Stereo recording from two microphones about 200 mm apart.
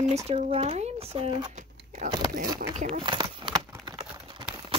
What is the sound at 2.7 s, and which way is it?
Speech, 35° right (ahead or behind).